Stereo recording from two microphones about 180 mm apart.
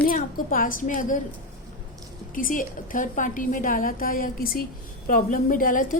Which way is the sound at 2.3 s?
50° left (ahead or behind).